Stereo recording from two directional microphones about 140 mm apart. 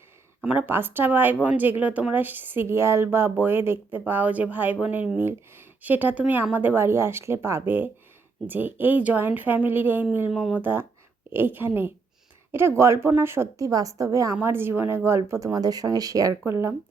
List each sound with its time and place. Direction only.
0.4 s speech: 10° right (ahead or behind)